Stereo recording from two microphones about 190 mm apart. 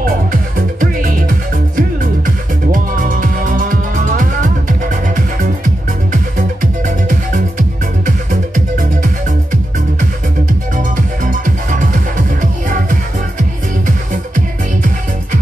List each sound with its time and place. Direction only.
0.0 s music: 45° right (ahead or behind)
10.8 s music: 45° right (ahead or behind)